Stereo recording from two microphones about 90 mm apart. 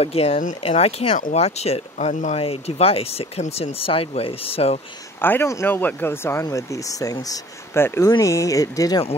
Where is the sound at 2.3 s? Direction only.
90° left.